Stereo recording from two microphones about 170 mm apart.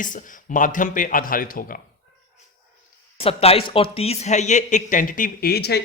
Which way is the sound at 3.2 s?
35° left (ahead or behind).